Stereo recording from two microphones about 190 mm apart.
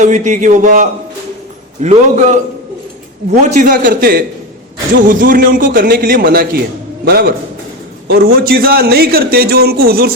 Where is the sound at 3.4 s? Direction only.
40° right (ahead or behind).